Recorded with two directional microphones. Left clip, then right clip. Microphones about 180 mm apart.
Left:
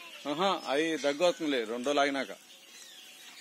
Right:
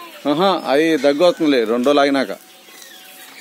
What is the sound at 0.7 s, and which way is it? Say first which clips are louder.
Speech: right 15 dB; 15° right (ahead or behind).